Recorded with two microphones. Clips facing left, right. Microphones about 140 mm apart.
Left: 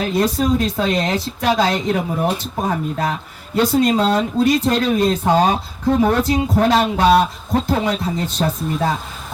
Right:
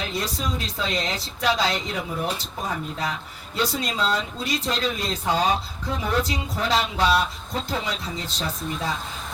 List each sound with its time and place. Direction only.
0.0 s speech: 55° left (ahead or behind)